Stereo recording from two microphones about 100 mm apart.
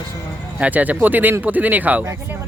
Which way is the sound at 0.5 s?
15° right (ahead or behind).